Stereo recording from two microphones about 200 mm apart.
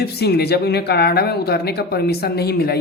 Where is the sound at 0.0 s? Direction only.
55° left (ahead or behind).